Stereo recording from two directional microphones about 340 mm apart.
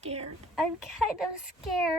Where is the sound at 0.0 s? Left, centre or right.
Centre.